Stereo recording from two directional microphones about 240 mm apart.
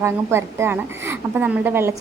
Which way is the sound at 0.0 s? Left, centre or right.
Centre.